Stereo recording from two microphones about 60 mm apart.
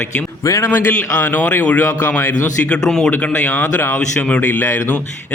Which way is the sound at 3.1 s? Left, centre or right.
Left.